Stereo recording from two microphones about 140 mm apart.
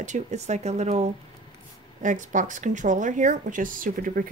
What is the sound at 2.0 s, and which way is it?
Speech, 65° right (ahead or behind).